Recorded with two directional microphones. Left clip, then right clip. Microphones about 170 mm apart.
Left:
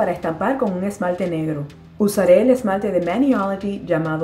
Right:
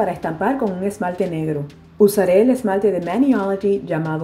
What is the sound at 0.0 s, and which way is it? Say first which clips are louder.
Speech: even; 5° right (ahead or behind).